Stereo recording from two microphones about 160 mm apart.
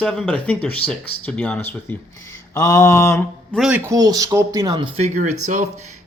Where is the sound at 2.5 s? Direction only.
20° left (ahead or behind).